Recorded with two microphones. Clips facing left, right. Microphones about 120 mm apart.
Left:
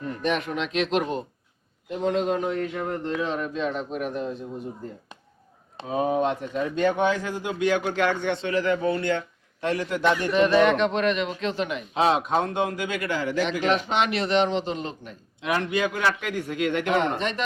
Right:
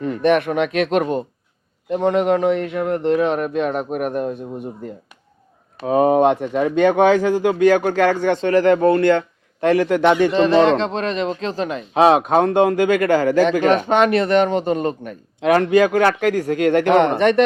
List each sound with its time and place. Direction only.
0.0 s a man's voice: 75° right (ahead or behind); by 1.2 s 55° right (ahead or behind)
1.9 s a man's voice: 70° right (ahead or behind)
5.8 s speech: 65° right (ahead or behind); by 7.5 s 85° right
7.6 s a man's voice: 45° right (ahead or behind); by 10.3 s 75° right (ahead or behind)
10.3 s speech: 30° right (ahead or behind)
11.9 s a man's voice: 65° right (ahead or behind)
16.5 s a man's voice: 40° right (ahead or behind)
16.8 s a man's voice: 65° right (ahead or behind)